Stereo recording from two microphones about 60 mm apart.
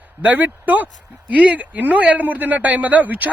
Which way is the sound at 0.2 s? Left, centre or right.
Right.